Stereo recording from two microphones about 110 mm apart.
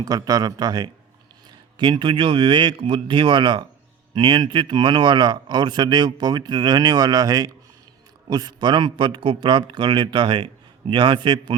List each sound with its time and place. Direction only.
0.0 s a man's voice: 35° right (ahead or behind)